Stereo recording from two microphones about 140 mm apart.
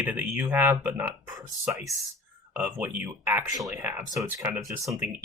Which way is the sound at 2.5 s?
15° right (ahead or behind).